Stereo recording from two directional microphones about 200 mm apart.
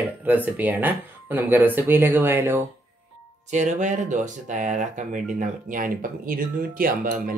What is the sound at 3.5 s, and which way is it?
Speech, 35° right (ahead or behind).